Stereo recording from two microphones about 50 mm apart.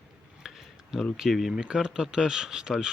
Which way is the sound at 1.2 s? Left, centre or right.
Centre.